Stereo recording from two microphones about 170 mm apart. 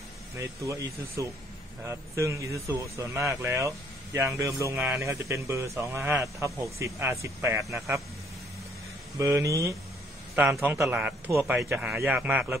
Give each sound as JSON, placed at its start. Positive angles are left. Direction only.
{"t": 0.4, "sound": "speech", "side_deg": -20}
{"t": 9.2, "sound": "speech", "side_deg": -20}
{"t": 10.3, "sound": "speech", "side_deg": -5}